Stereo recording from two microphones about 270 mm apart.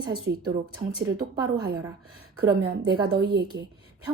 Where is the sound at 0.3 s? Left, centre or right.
Right.